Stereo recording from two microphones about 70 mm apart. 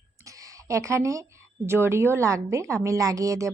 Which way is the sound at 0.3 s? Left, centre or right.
Right.